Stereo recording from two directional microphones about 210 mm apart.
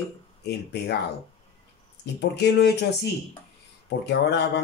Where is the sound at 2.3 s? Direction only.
50° left (ahead or behind).